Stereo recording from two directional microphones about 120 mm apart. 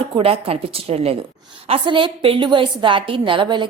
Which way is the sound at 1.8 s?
45° right (ahead or behind).